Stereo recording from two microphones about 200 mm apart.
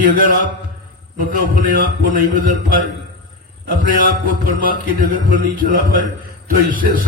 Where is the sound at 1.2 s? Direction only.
45° right (ahead or behind).